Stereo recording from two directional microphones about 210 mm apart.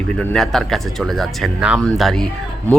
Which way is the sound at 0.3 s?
Centre (ahead or behind).